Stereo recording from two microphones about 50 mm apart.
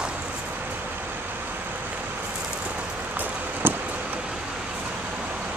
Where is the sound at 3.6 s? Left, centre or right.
Right.